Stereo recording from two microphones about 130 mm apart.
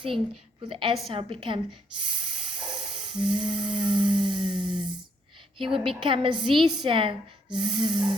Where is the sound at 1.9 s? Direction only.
40° right (ahead or behind).